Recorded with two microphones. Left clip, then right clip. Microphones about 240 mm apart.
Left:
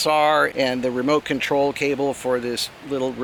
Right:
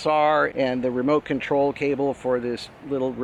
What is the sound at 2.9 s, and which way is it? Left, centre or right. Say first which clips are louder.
Speech: even; right.